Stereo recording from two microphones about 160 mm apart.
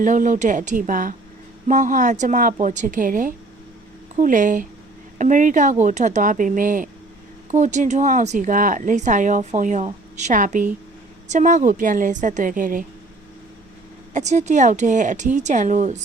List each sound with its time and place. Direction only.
0.0 s a woman's voice: 55° right (ahead or behind)
14.1 s speech: 45° right (ahead or behind)